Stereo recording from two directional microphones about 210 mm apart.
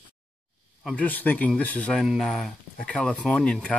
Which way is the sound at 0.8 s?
5° left (ahead or behind).